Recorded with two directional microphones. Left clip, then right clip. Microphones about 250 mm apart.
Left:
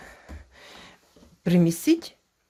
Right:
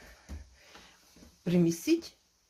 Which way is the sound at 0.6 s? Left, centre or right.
Left.